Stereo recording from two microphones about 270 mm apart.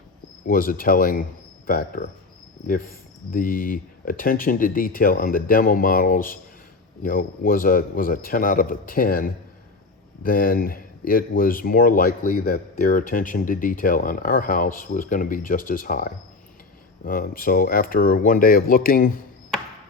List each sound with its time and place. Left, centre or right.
0.4 s speech: left
2.6 s speech: left